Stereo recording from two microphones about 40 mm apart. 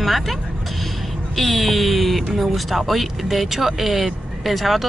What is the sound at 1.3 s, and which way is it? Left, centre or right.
Speech, centre.